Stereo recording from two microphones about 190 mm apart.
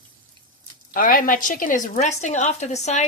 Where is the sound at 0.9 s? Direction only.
45° left (ahead or behind).